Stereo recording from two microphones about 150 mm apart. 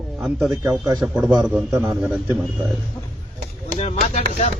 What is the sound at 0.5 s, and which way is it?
Speech, 20° right (ahead or behind).